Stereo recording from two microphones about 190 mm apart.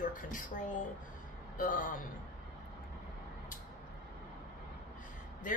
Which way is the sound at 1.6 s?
45° left (ahead or behind).